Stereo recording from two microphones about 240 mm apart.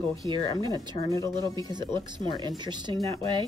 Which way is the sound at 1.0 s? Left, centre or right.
Centre.